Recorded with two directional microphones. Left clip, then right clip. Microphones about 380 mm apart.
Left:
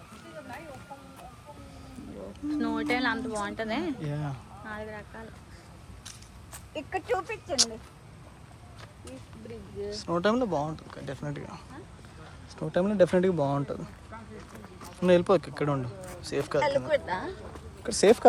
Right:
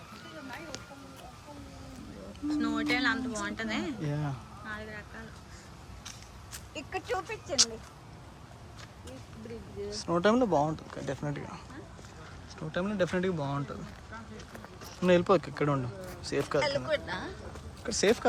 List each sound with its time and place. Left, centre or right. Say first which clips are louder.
2.5 s a woman's voice: left 1 dB; centre
4.0 s speech: even; centre
4.6 s a sound: left 2 dB; centre
6.7 s speech: left 4 dB; centre
10.0 s speech: right 1 dB; centre
15.0 s speech: left 2 dB; centre
16.6 s speech: left 5 dB; centre
17.8 s speech: left 6 dB; centre